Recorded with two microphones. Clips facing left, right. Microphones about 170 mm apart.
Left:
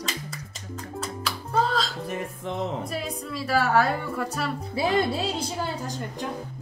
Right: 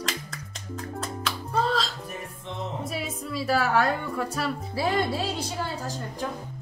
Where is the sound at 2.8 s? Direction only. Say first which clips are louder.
Left 1 dB; centre (ahead or behind).